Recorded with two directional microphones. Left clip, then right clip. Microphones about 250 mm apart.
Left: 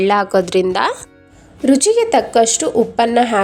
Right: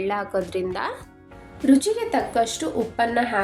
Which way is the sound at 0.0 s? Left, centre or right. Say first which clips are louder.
Left 11 dB; left.